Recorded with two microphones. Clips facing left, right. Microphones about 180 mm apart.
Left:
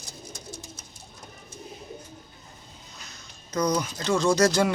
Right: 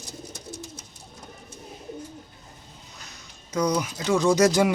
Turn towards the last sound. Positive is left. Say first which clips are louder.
# right 2 dB
turn(degrees=-15)  # may be behind; listen again after turning